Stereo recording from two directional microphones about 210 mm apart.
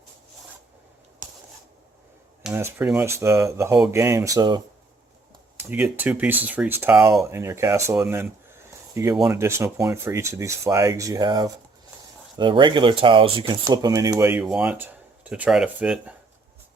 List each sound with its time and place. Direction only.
2.4 s speech: 10° right (ahead or behind)
5.6 s speech: 10° right (ahead or behind)